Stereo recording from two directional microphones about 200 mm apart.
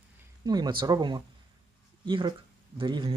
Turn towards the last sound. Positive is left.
turn(degrees=-25)  # may be behind; listen again after turning